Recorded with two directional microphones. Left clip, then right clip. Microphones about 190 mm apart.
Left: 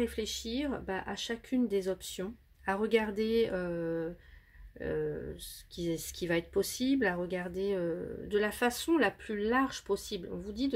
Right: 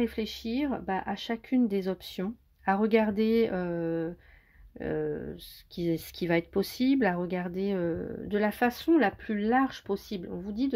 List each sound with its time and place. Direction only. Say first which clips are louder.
0.0 s speech: right 2 dB; 35° right (ahead or behind)